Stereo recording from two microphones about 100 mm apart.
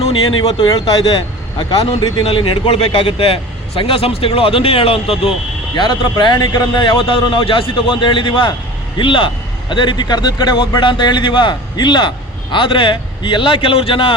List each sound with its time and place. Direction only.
0.0 s speech: 90° left
0.7 s speech: 45° left (ahead or behind)
3.0 s a man's voice: 65° left (ahead or behind)
5.7 s a man's voice: 50° left (ahead or behind)